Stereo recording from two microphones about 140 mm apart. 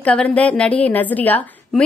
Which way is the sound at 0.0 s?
10° left (ahead or behind).